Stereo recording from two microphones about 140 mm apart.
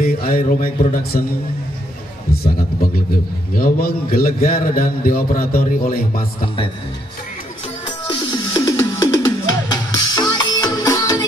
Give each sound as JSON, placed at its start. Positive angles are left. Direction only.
{"t": 0.0, "sound": "a man's voice", "side_deg": 90}
{"t": 2.3, "sound": "a man's voice", "side_deg": 90}
{"t": 6.4, "sound": "a man's voice", "side_deg": 40}
{"t": 8.3, "sound": "music", "side_deg": 25}